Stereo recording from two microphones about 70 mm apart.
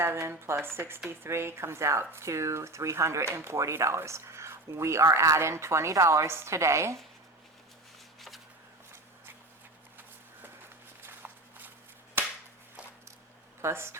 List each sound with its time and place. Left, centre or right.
0.0 s speech: right
11.0 s walk: right
13.6 s speech: right